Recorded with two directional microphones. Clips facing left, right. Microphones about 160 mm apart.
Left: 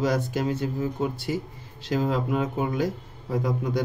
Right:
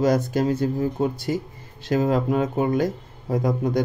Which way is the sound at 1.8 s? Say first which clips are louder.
Right 4 dB; 50° right (ahead or behind).